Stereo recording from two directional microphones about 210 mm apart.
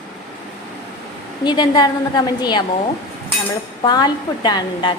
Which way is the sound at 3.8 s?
20° left (ahead or behind).